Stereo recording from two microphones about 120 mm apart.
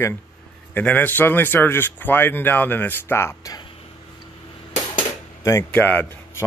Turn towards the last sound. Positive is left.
turn(degrees=15)  # may be behind; listen again after turning